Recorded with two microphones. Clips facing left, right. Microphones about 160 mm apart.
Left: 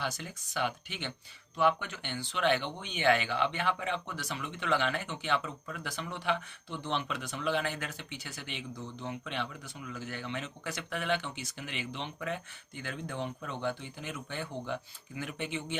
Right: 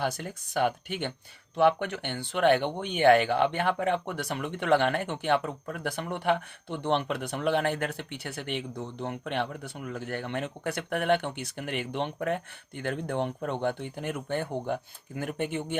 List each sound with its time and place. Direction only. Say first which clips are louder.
0.0 s speech: right 6 dB; 55° right (ahead or behind)